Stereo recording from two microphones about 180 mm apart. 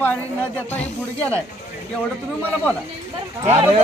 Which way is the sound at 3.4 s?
35° right (ahead or behind).